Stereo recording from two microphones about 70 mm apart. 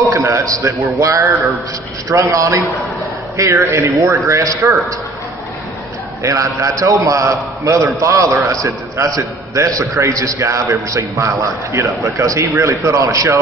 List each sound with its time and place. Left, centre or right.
0.1 s a man's voice: right
6.2 s a man's voice: right